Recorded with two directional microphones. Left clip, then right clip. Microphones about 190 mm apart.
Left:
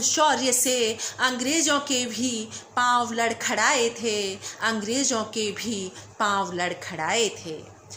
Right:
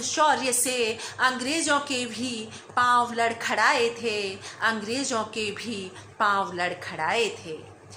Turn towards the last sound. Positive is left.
turn(degrees=35)  # may be behind; listen again after turning